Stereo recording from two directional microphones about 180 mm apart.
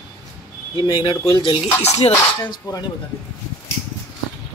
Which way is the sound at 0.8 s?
25° left (ahead or behind).